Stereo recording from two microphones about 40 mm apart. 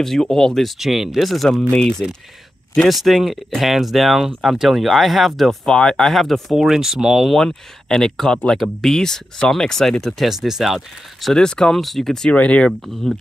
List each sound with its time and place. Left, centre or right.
0.0 s speech: centre
0.7 s speech: centre
1.7 s speech: centre
2.9 s speech: centre
5.7 s speech: centre
6.1 s speech: centre
6.5 s speech: centre
7.3 s speech: centre
10.3 s speech: centre
11.3 s speech: centre
11.7 s speech: centre
12.3 s speech: left
12.8 s speech: centre